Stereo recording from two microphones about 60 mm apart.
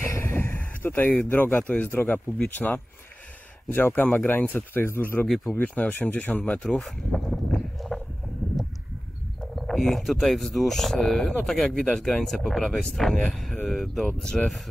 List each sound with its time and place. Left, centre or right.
0.0 s vehicle: left
1.3 s speech: left
6.8 s a sound: centre
9.4 s speech: centre